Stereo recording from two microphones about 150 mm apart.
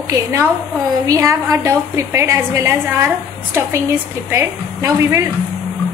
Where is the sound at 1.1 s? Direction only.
20° right (ahead or behind).